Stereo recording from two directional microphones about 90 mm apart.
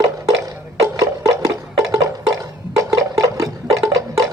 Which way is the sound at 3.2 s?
35° right (ahead or behind).